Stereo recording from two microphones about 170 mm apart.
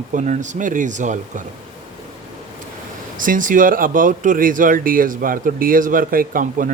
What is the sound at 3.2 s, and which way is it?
Speech, 50° right (ahead or behind).